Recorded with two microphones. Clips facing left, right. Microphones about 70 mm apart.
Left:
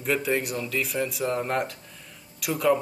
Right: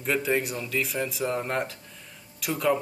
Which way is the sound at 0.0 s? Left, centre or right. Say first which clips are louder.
Even; centre.